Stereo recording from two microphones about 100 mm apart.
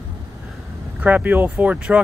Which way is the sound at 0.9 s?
15° right (ahead or behind).